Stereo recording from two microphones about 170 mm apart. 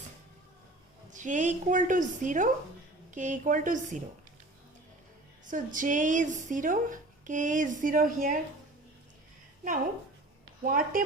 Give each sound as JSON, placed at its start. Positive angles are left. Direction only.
{"t": 1.1, "sound": "speech", "side_deg": -45}
{"t": 5.5, "sound": "speech", "side_deg": -50}
{"t": 10.7, "sound": "speech", "side_deg": -55}